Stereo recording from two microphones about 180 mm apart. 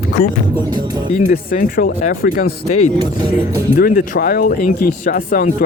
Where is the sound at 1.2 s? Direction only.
50° left (ahead or behind).